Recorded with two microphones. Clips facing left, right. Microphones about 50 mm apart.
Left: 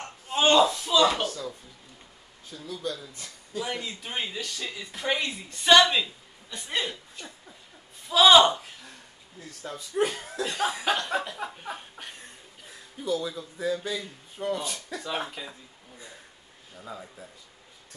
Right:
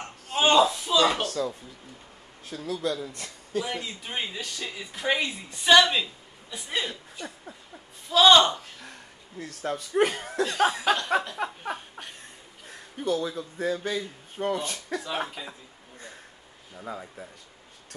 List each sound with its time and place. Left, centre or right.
0.0 s a sound: centre
0.7 s speech: centre
1.4 s speech: right
2.4 s a man's voice: right
3.6 s a woman's voice: centre
8.1 s a woman's voice: centre
9.4 s speech: right
10.7 s a woman's voice: centre
11.3 s speech: right
12.6 s a sound: right
13.2 s a man's voice: right
13.6 s speech: right
15.0 s a woman's voice: centre
17.2 s speech: right